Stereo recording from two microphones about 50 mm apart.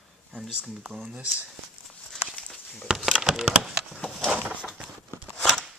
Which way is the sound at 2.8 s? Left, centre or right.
Centre.